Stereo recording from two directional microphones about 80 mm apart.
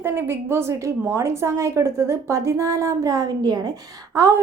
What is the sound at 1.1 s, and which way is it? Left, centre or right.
A woman's voice, right.